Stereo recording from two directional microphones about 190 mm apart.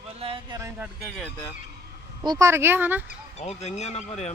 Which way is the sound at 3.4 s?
35° left (ahead or behind).